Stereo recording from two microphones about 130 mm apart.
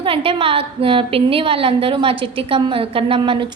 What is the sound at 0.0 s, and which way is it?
A woman's voice, 45° right (ahead or behind).